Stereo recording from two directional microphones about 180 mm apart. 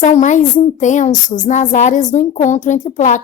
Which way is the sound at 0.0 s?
40° left (ahead or behind).